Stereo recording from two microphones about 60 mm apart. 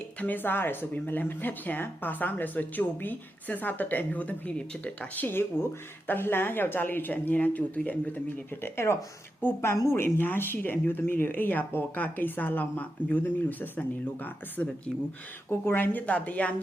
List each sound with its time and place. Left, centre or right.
0.2 s speech: left
8.6 s speech: left